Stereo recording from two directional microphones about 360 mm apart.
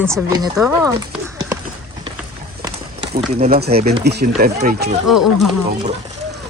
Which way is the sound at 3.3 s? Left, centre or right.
Right.